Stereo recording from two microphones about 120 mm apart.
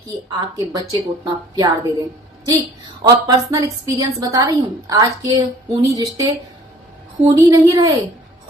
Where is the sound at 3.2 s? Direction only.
30° right (ahead or behind).